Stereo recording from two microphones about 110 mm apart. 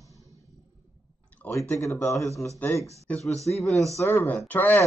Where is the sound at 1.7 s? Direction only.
25° left (ahead or behind).